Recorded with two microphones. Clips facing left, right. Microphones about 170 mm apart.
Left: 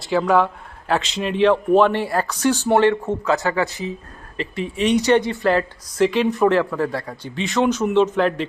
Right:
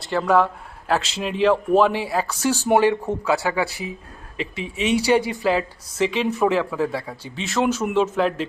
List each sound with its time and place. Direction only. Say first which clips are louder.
0.0 s speech: left 1 dB; centre (ahead or behind)